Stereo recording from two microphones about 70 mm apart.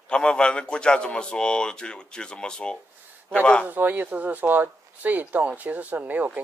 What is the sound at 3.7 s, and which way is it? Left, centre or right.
Speech, right.